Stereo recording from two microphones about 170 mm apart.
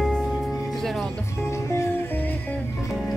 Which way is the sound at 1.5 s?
15° left (ahead or behind).